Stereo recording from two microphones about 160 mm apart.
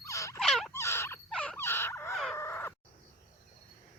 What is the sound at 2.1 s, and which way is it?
Fowl, centre (ahead or behind).